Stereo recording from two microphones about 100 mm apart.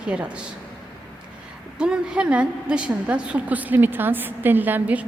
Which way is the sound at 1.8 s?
10° right (ahead or behind).